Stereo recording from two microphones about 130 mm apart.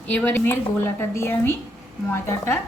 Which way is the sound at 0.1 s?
15° left (ahead or behind).